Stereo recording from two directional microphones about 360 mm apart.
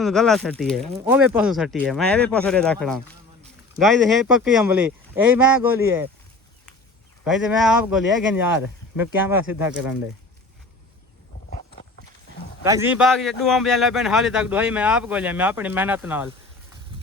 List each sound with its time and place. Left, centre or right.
0.0 s a man's voice: centre
7.3 s a man's voice: centre
11.5 s walk: left
12.6 s a man's voice: centre
16.9 s a sound: centre